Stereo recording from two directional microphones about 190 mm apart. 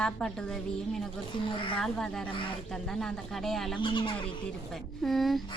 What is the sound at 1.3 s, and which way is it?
Speech, 25° left (ahead or behind).